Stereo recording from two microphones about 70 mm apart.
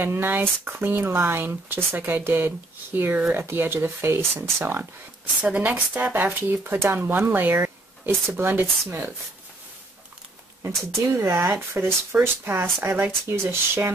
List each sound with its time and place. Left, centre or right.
0.0 s speech: right
5.4 s speech: centre
11.2 s speech: right